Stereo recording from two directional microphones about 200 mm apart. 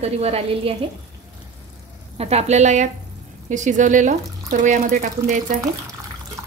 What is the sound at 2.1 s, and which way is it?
Speech, 30° right (ahead or behind).